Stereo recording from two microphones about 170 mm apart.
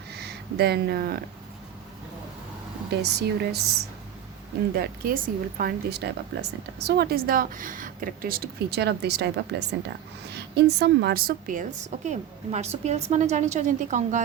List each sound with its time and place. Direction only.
0.1 s speech: 75° right (ahead or behind)
2.9 s speech: 75° right (ahead or behind)
4.7 s a woman's voice: 60° right (ahead or behind); by 14.2 s 45° right (ahead or behind)